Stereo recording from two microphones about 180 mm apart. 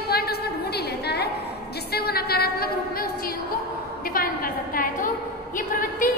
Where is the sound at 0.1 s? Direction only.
60° left (ahead or behind).